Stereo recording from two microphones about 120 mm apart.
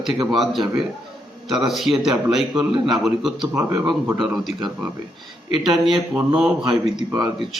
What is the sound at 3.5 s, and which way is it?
Speech, 20° right (ahead or behind).